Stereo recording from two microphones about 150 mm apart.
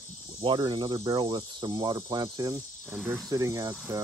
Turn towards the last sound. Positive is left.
turn(degrees=-20)  # may be behind; listen again after turning